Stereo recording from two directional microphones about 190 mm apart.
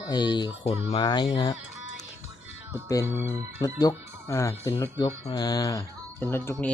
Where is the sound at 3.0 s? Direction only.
10° right (ahead or behind).